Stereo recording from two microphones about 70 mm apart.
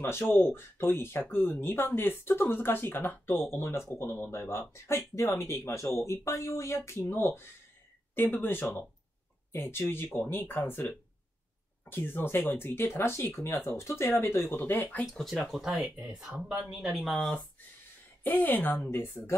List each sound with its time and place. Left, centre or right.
0.0 s speech: left
11.8 s speech: left
15.6 s speech: centre
16.7 s speech: centre
18.2 s a woman's voice: left